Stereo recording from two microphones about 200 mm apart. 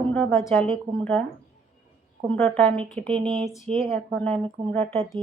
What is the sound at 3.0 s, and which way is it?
Speech, 25° right (ahead or behind).